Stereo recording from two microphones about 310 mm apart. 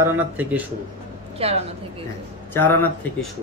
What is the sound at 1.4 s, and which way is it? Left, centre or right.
Speech, centre.